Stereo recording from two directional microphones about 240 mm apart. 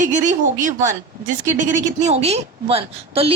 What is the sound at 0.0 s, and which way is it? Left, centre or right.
A woman's voice, right.